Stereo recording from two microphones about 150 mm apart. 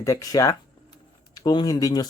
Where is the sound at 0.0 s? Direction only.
20° left (ahead or behind).